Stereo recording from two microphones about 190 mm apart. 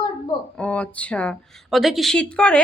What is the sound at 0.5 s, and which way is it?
Speech, 5° left (ahead or behind).